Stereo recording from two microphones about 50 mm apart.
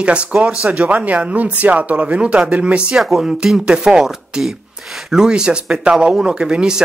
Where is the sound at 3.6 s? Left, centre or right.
Centre.